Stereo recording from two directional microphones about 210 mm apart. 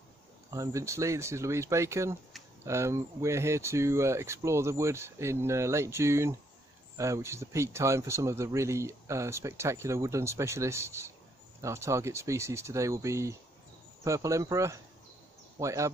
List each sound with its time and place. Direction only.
0.5 s speech: 15° right (ahead or behind)